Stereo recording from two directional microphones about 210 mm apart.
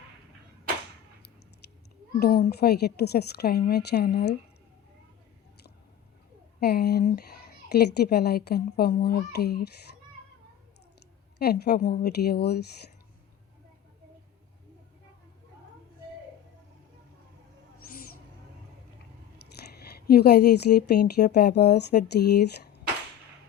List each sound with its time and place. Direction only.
2.1 s a woman's voice: 45° left (ahead or behind)
6.6 s a woman's voice: 50° left (ahead or behind)
11.3 s a woman's voice: 50° left (ahead or behind)
19.8 s a woman's voice: 50° left (ahead or behind)